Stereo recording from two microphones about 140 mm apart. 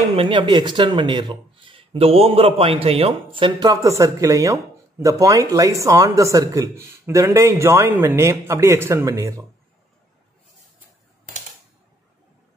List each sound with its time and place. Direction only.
0.1 s speech: 40° right (ahead or behind)
3.5 s speech: 25° right (ahead or behind)